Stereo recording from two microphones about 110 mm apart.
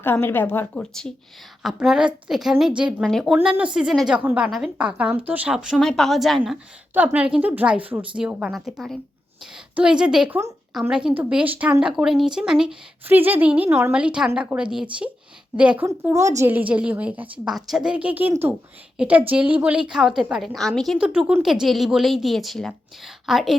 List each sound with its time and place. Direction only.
0.0 s speech: 20° left (ahead or behind)
0.8 s a woman's voice: 5° left (ahead or behind)
3.6 s a woman's voice: 10° right (ahead or behind)
6.4 s a woman's voice: 15° right (ahead or behind)
13.1 s a woman's voice: 20° right (ahead or behind)
16.1 s a woman's voice: 30° right (ahead or behind)
16.5 s a woman's voice: 15° right (ahead or behind)
17.4 s a woman's voice: 5° right (ahead or behind)